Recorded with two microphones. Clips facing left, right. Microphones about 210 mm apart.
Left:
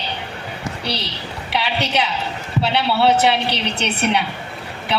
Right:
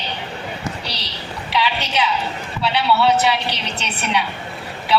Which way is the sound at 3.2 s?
60° left (ahead or behind).